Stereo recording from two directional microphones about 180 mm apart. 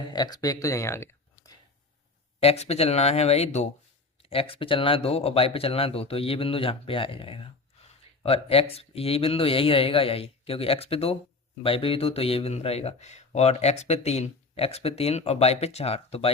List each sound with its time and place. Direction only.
0.0 s speech: 25° left (ahead or behind)
2.4 s speech: 35° left (ahead or behind)